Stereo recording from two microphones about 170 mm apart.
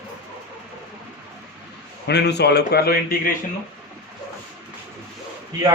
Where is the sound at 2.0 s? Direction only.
80° left; by 3.3 s 60° left (ahead or behind).